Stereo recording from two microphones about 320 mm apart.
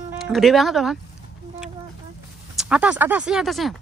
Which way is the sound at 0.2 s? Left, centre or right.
Centre.